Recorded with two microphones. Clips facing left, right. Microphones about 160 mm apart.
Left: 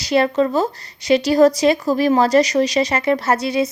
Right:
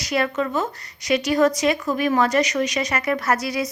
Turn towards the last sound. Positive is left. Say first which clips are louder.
# left 5 dB
turn(degrees=25)  # may be behind; listen again after turning